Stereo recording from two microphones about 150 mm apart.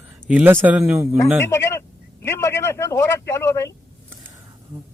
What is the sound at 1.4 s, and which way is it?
Speech, 15° left (ahead or behind).